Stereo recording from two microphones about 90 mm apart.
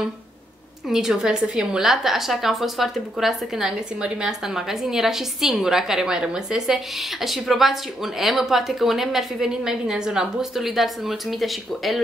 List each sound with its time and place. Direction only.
0.8 s a woman's voice: 5° right (ahead or behind)